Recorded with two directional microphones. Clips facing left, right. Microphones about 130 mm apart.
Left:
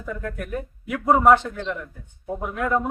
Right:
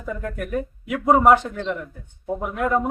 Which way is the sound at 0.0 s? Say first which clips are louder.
Right 2 dB; 15° right (ahead or behind).